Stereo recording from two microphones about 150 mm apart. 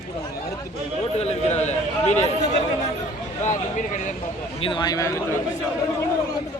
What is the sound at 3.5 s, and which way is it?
Speech, 60° left (ahead or behind).